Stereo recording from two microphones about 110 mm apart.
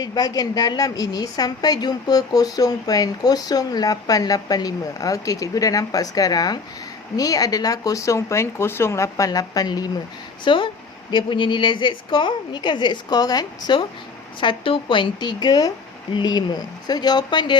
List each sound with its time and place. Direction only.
0.0 s a woman's voice: 35° left (ahead or behind)
10.4 s a woman's voice: 50° left (ahead or behind)
14.4 s a woman's voice: 50° left (ahead or behind)